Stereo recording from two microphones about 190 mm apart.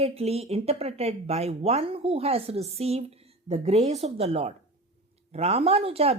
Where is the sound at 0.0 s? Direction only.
30° right (ahead or behind).